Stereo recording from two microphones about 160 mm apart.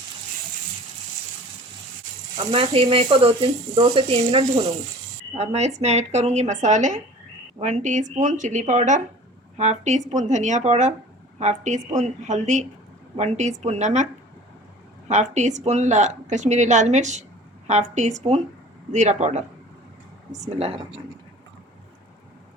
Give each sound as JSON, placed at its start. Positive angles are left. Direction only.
{"t": 2.5, "sound": "a woman's voice", "side_deg": -35}